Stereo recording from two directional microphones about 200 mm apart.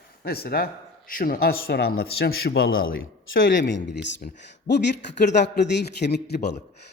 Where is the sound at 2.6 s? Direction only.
80° left; by 6.5 s 55° left (ahead or behind).